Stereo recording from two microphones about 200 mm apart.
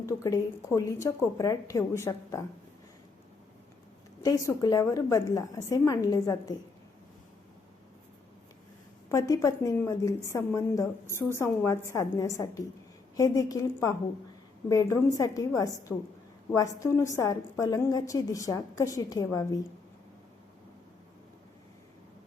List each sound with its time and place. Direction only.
0.0 s a woman's voice: 15° left (ahead or behind)
4.2 s a woman's voice: 15° left (ahead or behind)
9.0 s a woman's voice: 15° left (ahead or behind)